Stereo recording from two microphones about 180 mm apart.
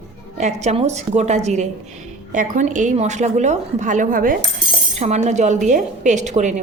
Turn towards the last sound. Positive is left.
turn(degrees=-40)  # may be behind; listen again after turning